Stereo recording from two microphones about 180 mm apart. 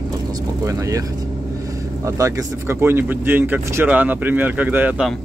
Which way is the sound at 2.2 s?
15° right (ahead or behind).